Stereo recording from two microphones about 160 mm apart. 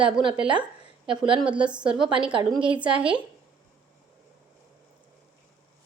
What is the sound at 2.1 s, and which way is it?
Speech, 30° right (ahead or behind).